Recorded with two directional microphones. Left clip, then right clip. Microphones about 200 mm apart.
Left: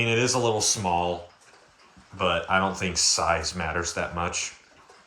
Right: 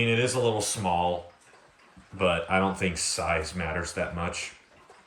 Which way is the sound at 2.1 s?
Centre (ahead or behind).